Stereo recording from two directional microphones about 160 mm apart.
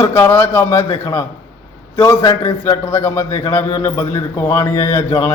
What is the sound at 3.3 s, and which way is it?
Speech, 35° left (ahead or behind).